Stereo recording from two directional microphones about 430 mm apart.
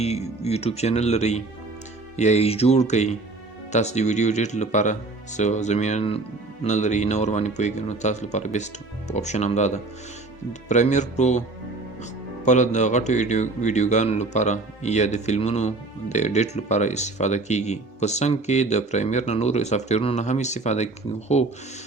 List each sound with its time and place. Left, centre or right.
0.0 s speech: centre
12.5 s speech: centre